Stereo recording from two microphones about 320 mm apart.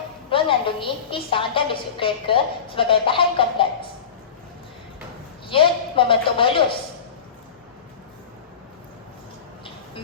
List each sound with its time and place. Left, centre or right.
0.3 s a woman's voice: centre
5.5 s a woman's voice: centre